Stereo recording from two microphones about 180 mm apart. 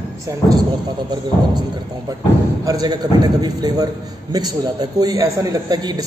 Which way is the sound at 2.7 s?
20° right (ahead or behind).